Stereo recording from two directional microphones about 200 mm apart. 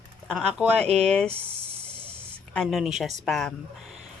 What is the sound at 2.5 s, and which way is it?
Speech, centre (ahead or behind).